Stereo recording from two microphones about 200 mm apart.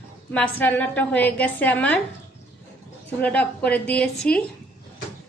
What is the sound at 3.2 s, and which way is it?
A woman's voice, 5° left (ahead or behind).